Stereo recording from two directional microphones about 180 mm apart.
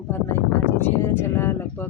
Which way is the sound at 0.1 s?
10° left (ahead or behind).